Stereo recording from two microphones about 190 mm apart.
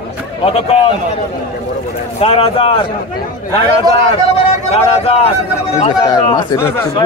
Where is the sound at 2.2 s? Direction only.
30° left (ahead or behind).